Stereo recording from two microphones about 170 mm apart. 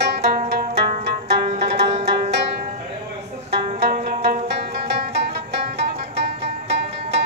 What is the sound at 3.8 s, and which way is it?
Zither, 65° right (ahead or behind).